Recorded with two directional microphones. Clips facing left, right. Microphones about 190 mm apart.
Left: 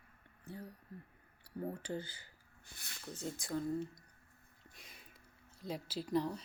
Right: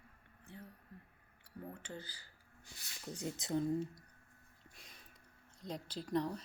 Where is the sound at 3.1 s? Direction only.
20° right (ahead or behind).